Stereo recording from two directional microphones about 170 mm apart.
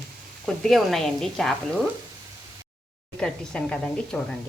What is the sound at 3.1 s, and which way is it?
Speech, 5° left (ahead or behind).